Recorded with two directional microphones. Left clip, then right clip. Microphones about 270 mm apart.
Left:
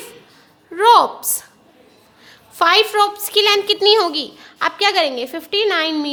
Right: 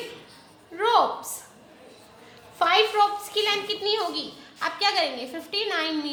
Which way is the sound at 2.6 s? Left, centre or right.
Left.